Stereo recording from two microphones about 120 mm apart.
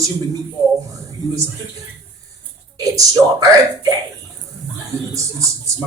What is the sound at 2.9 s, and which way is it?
Speech, 30° right (ahead or behind).